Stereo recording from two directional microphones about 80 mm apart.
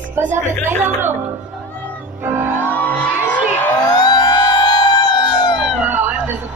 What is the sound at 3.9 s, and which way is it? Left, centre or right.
Emergency vehicle, left.